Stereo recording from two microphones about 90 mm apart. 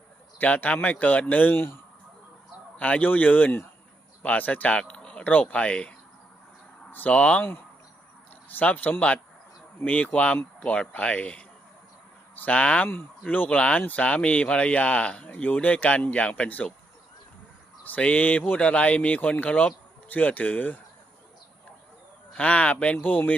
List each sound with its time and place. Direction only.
0.3 s speech: 20° left (ahead or behind)
6.9 s speech: 15° left (ahead or behind)
17.8 s speech: 15° left (ahead or behind)
22.3 s speech: 15° left (ahead or behind)